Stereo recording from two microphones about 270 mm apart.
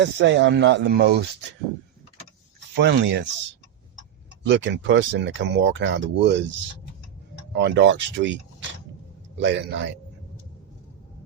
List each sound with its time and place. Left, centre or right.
0.0 s speech: right
2.8 s speech: right
4.4 s speech: right
7.5 s speech: right
9.4 s speech: right